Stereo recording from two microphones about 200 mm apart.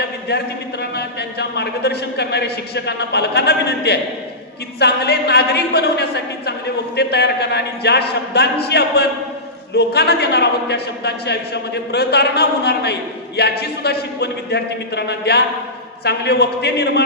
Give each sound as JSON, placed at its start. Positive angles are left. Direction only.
{"t": 0.0, "sound": "a man's voice", "side_deg": 55}